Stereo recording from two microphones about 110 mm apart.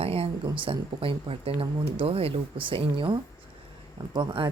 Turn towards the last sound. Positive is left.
turn(degrees=-45)  # may be behind; listen again after turning